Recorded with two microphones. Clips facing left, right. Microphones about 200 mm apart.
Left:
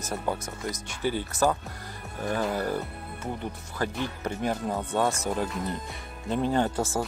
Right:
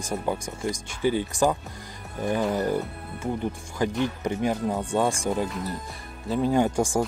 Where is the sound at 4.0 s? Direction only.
15° right (ahead or behind).